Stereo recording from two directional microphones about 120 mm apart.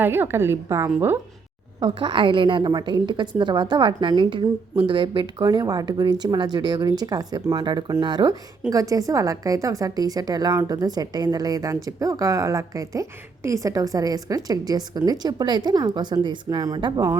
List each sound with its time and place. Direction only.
0.0 s a woman's voice: 20° right (ahead or behind)
1.8 s a woman's voice: 45° right (ahead or behind)